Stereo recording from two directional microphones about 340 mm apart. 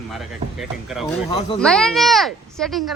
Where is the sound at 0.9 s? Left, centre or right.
Centre.